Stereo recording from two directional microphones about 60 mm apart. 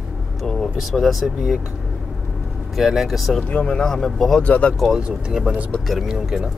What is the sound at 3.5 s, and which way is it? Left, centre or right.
Speech, centre.